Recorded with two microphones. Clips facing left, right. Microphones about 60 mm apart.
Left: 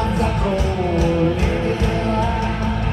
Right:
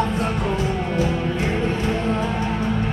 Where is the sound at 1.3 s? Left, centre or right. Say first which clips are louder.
Left 2 dB; left.